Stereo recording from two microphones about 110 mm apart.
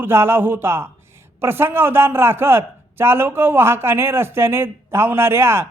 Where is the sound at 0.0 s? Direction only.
20° right (ahead or behind).